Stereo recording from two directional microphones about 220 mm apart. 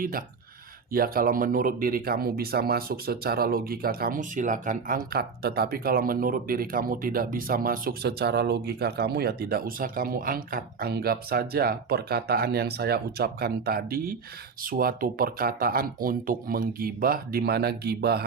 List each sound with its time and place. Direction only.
0.0 s speech: 40° right (ahead or behind)